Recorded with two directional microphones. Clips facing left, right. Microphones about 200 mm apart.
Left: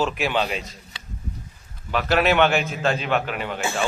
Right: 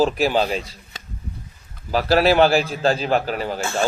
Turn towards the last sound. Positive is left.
turn(degrees=-35)  # may be behind; listen again after turning